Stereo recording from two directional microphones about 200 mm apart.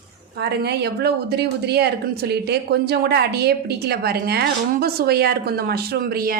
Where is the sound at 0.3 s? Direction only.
55° right (ahead or behind).